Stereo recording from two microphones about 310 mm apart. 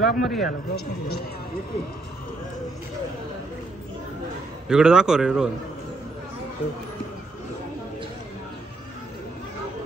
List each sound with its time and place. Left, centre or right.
0.0 s a man's voice: centre
0.5 s a man's voice: left
4.6 s a man's voice: centre